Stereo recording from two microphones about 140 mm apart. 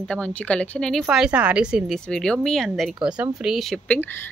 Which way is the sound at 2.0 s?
5° left (ahead or behind).